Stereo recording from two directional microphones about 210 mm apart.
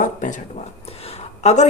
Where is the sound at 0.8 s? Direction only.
30° left (ahead or behind).